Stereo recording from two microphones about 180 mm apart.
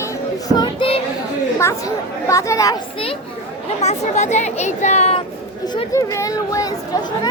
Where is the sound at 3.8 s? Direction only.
40° left (ahead or behind).